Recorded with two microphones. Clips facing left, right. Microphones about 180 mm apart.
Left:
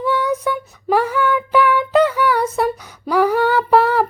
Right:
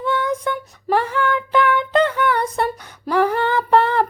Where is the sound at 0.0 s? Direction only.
10° left (ahead or behind).